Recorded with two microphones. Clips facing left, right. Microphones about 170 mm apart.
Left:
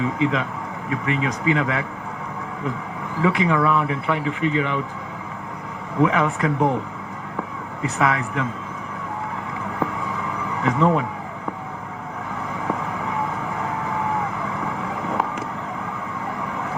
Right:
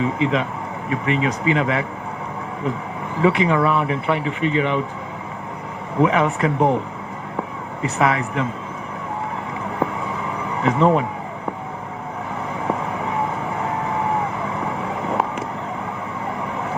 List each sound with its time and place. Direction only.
0.0 s speech: 20° right (ahead or behind)
3.2 s speech: 20° right (ahead or behind)
6.0 s speech: 20° right (ahead or behind)
7.8 s speech: 25° right (ahead or behind)
9.8 s a sound: 25° right (ahead or behind)
12.6 s vehicle: 25° right (ahead or behind)